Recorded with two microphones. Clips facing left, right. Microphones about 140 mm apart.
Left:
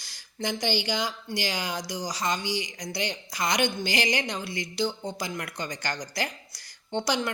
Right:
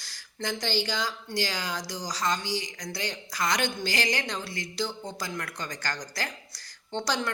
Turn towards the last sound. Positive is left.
turn(degrees=15)  # may be behind; listen again after turning